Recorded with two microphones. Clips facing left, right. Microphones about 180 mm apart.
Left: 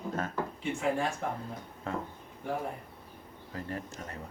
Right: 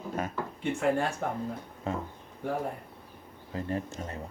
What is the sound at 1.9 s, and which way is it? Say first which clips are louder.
Speech: right 2 dB; 20° right (ahead or behind).